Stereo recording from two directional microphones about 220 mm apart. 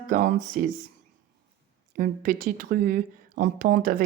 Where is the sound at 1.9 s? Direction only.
40° right (ahead or behind).